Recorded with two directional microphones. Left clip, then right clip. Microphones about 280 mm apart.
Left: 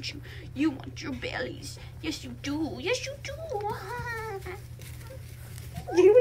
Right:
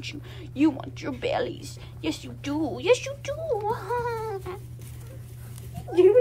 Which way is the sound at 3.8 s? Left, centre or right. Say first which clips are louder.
Right 7 dB; centre.